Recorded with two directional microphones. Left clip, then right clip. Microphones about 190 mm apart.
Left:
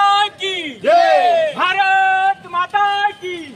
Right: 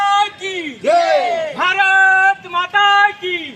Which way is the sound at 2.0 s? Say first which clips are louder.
Right 3 dB; 45° right (ahead or behind).